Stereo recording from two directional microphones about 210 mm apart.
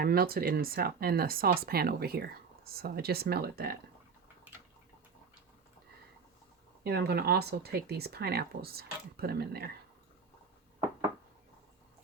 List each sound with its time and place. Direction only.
0.0 s speech: 45° right (ahead or behind)
6.8 s speech: 50° right (ahead or behind)